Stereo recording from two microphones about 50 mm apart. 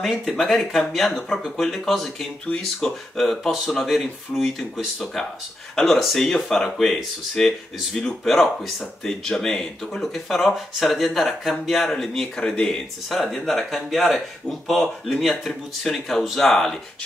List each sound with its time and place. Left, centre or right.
0.2 s speech: centre
2.8 s speech: left
3.2 s speech: centre
13.1 s speech: centre